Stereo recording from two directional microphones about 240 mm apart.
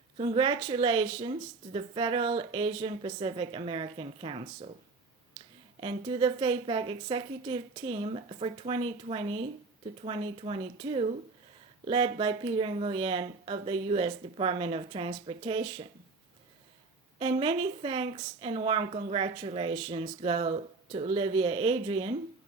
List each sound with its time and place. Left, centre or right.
0.2 s speech: right
5.4 s a sound: centre
5.8 s speech: right
17.2 s speech: right